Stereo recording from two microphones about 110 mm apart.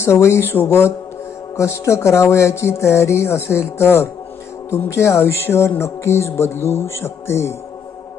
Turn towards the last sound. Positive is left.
turn(degrees=25)  # may be behind; listen again after turning